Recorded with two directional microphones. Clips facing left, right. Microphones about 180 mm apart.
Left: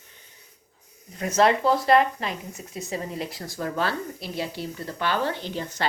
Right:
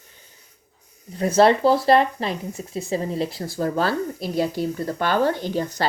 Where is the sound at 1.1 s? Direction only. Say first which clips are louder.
Right 5 dB; 35° right (ahead or behind).